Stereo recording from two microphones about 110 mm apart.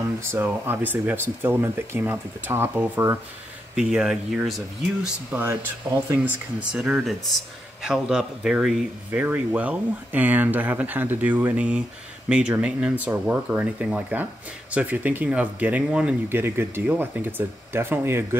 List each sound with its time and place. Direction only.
0.3 s speech: 20° right (ahead or behind)
3.7 s speech: 5° right (ahead or behind)
5.3 s speech: 20° right (ahead or behind)
6.7 s speech: 5° right (ahead or behind)
9.1 s speech: 15° right (ahead or behind)
16.3 s speech: 20° right (ahead or behind)